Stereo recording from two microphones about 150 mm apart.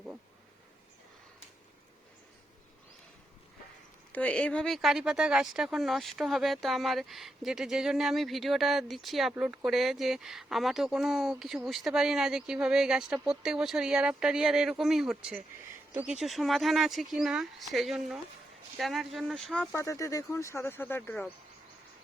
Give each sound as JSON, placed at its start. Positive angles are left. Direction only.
{"t": 4.1, "sound": "speech", "side_deg": 10}
{"t": 9.3, "sound": "speech", "side_deg": -10}
{"t": 19.7, "sound": "speech", "side_deg": 20}